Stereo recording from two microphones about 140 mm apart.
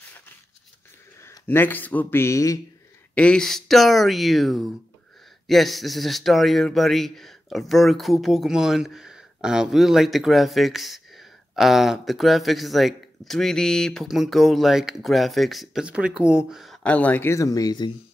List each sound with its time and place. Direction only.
1.2 s speech: 20° left (ahead or behind)
3.2 s a man's voice: 5° left (ahead or behind); by 17.9 s 30° left (ahead or behind)